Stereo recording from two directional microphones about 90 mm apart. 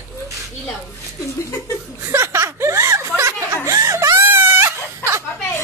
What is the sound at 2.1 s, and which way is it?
Chuckle, 30° right (ahead or behind).